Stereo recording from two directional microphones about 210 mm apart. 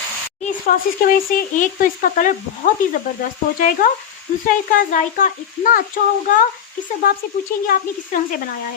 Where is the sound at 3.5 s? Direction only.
40° left (ahead or behind).